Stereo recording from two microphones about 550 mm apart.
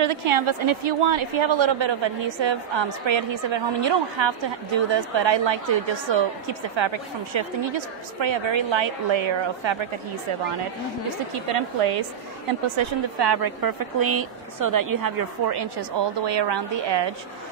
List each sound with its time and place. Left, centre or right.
0.0 s a woman's voice: right
11.3 s a woman's voice: right
12.7 s a woman's voice: right